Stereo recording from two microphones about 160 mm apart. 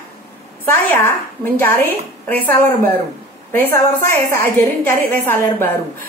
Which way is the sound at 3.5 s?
15° left (ahead or behind).